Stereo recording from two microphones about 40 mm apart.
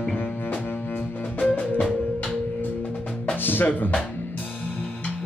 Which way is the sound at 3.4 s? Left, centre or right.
Left.